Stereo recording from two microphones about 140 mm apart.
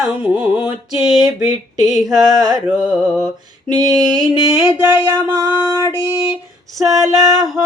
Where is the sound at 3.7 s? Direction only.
25° right (ahead or behind).